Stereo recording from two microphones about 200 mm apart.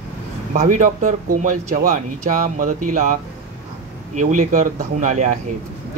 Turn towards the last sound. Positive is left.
turn(degrees=-40)  # may be behind; listen again after turning